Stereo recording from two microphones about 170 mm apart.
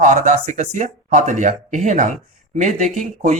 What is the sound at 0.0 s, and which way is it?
Speech, 50° right (ahead or behind).